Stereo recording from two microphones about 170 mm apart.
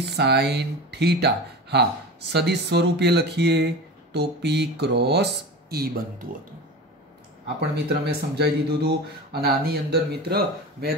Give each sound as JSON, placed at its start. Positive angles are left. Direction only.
{"t": 0.0, "sound": "speech", "side_deg": -80}
{"t": 7.7, "sound": "speech", "side_deg": -75}